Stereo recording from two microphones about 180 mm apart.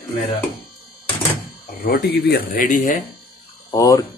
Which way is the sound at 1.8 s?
55° left (ahead or behind).